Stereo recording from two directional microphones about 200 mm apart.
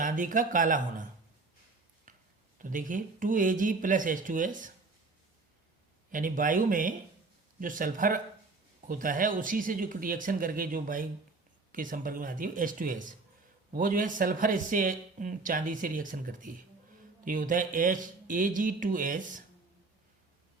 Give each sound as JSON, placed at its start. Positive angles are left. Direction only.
{"t": 0.0, "sound": "speech", "side_deg": -40}
{"t": 2.1, "sound": "a sound", "side_deg": -40}
{"t": 2.6, "sound": "speech", "side_deg": -40}
{"t": 6.1, "sound": "speech", "side_deg": -45}